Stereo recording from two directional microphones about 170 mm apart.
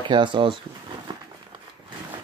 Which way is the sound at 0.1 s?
30° right (ahead or behind).